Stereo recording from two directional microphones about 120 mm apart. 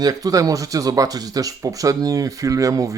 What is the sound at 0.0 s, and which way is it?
Speech, 30° right (ahead or behind).